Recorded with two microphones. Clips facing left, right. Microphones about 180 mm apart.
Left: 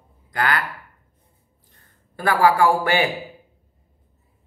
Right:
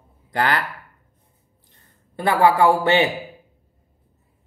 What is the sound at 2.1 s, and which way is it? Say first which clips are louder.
Speech: right 1 dB; 20° right (ahead or behind).